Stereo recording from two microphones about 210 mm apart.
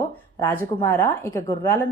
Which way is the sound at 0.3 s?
10° left (ahead or behind).